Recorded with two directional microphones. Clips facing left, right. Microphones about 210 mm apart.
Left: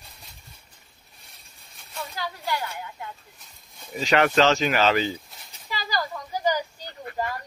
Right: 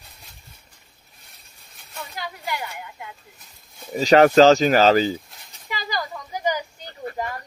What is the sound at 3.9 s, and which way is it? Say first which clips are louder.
Speech: right 7 dB; 40° right (ahead or behind).